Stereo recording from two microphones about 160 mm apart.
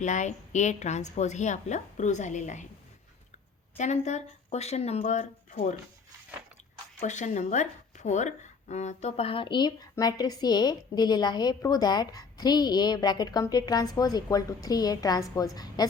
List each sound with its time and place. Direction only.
0.0 s a woman's voice: 50° left (ahead or behind)
3.8 s a woman's voice: 45° left (ahead or behind)
7.0 s speech: 50° left (ahead or behind); by 15.9 s 25° left (ahead or behind)